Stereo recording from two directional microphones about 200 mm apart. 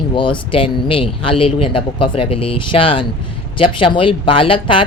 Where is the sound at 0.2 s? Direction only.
25° left (ahead or behind).